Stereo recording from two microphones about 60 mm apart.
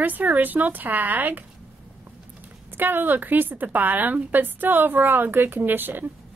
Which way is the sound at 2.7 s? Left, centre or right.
Right.